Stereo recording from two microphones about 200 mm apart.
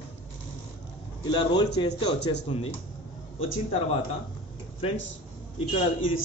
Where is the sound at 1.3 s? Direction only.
25° left (ahead or behind).